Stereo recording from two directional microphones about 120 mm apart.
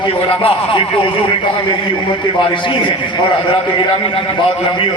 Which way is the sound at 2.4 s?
45° left (ahead or behind).